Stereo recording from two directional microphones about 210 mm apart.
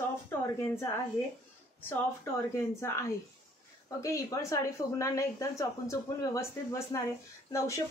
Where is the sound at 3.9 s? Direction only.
15° left (ahead or behind).